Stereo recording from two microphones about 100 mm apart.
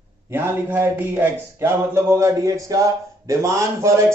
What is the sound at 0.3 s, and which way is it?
Speech, 20° right (ahead or behind).